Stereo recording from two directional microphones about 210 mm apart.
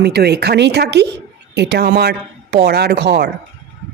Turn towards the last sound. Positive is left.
turn(degrees=-50)  # may be behind; listen again after turning